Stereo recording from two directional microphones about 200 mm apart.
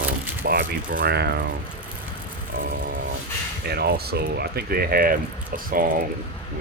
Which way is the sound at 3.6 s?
55° right (ahead or behind).